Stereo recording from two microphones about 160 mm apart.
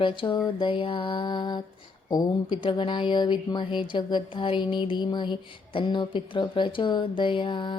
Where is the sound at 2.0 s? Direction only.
25° left (ahead or behind).